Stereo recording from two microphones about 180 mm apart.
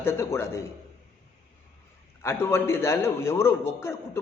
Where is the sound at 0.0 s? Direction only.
15° left (ahead or behind).